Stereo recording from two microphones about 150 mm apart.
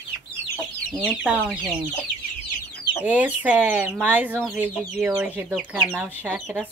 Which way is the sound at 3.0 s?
10° right (ahead or behind).